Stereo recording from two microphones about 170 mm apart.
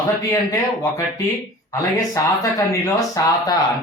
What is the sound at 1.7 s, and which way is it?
Speech, 20° left (ahead or behind).